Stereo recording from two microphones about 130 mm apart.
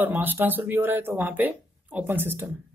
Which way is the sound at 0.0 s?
15° right (ahead or behind).